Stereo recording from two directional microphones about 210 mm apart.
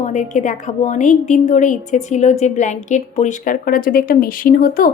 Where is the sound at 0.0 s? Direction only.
35° left (ahead or behind).